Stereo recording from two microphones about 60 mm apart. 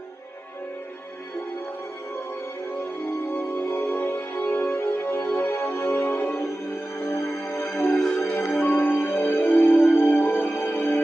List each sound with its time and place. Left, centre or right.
2.8 s music: left